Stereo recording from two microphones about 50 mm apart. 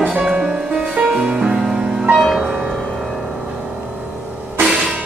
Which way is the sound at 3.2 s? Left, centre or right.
Centre.